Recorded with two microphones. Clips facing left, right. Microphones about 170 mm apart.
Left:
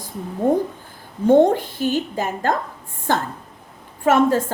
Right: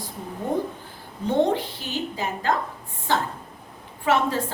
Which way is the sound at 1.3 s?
45° left (ahead or behind).